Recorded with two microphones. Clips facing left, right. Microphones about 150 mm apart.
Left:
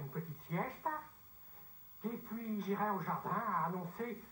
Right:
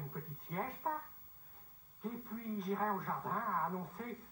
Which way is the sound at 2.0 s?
Centre (ahead or behind).